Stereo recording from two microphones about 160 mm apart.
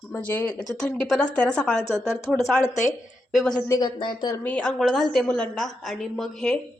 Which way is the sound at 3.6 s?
20° left (ahead or behind).